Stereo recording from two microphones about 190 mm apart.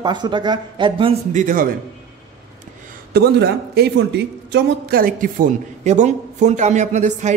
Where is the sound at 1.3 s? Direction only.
45° right (ahead or behind).